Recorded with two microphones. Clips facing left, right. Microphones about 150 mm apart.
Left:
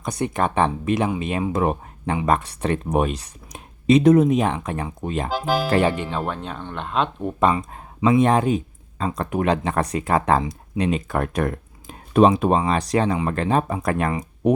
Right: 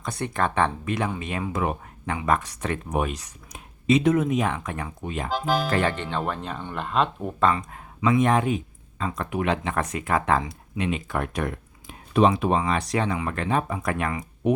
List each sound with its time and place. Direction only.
0.0 s speech: 20° left (ahead or behind)
5.3 s speech: 5° left (ahead or behind)
7.3 s speech: 15° left (ahead or behind)
7.7 s speech: 30° left (ahead or behind)